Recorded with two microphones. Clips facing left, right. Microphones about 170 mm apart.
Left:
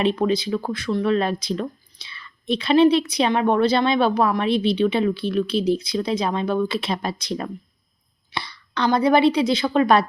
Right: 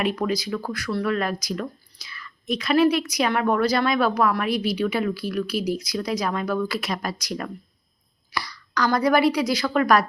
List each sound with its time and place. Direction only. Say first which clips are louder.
0.0 s a woman's voice: left 4 dB; 25° left (ahead or behind)